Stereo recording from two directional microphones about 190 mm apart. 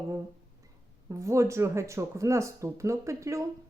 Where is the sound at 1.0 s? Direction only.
15° right (ahead or behind).